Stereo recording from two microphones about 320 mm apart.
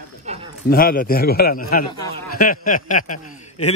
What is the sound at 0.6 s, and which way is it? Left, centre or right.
A man's voice, left.